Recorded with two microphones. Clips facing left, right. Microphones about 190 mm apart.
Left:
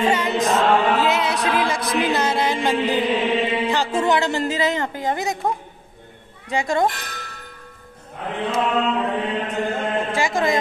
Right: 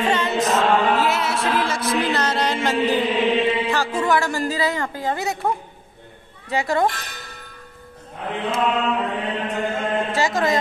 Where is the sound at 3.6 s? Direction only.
20° left (ahead or behind).